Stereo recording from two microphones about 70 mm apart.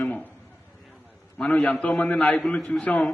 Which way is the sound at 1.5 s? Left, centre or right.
Centre.